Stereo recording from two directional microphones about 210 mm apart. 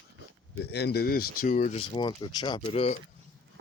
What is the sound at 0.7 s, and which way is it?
Speech, 50° left (ahead or behind).